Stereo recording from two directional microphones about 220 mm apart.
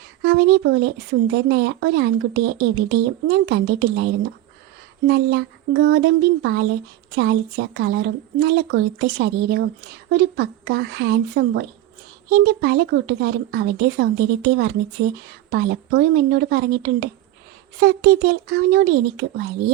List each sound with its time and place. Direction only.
0.2 s speech: 50° right (ahead or behind)